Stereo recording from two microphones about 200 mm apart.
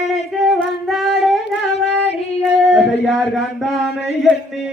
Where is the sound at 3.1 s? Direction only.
Centre (ahead or behind).